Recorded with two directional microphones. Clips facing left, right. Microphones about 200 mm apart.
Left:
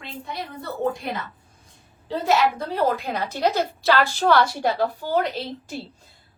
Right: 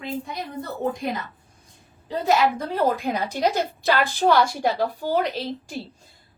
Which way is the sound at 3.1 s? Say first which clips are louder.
Even; 10° right (ahead or behind).